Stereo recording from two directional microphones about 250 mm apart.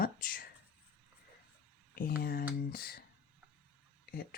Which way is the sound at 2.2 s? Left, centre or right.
Left.